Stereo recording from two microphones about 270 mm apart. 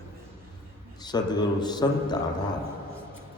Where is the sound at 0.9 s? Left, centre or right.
Centre.